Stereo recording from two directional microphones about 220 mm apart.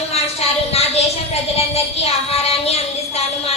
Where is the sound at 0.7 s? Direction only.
30° left (ahead or behind).